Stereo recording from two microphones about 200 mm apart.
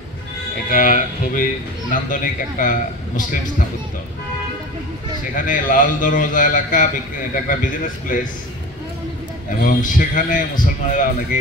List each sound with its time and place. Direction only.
0.7 s a man's voice: 40° left (ahead or behind)
5.3 s a man's voice: 40° left (ahead or behind)
9.6 s a man's voice: 45° left (ahead or behind)